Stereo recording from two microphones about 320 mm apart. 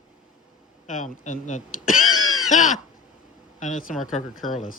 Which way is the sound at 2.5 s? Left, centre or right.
Left.